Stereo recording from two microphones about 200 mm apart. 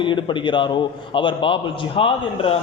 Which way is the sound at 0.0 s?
25° left (ahead or behind).